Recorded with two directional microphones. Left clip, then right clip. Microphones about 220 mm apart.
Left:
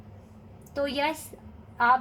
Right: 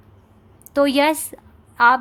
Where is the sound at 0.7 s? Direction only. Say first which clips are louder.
Right 11 dB; 50° right (ahead or behind).